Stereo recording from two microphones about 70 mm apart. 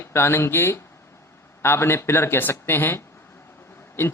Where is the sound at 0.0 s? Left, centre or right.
Left.